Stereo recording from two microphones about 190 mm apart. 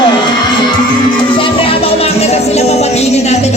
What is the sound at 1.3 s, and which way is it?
Music, 30° left (ahead or behind).